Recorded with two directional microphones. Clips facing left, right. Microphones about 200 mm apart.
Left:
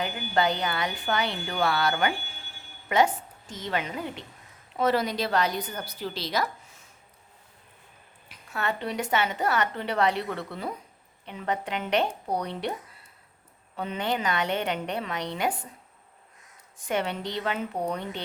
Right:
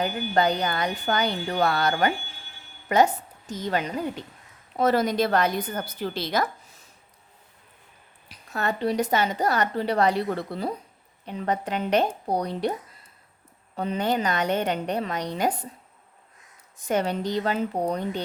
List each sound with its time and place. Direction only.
0.0 s a woman's voice: 40° right (ahead or behind)
8.3 s a woman's voice: 40° right (ahead or behind)
13.7 s a woman's voice: 40° right (ahead or behind)
16.9 s a woman's voice: 40° right (ahead or behind)